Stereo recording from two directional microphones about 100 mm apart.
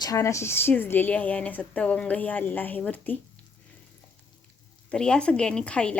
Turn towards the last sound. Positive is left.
turn(degrees=10)  # may be behind; listen again after turning